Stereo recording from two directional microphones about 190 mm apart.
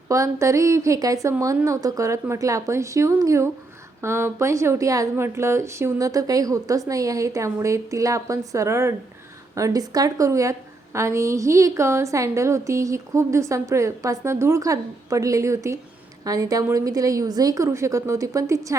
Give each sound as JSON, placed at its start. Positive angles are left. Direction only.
{"t": 0.1, "sound": "a woman's voice", "side_deg": -15}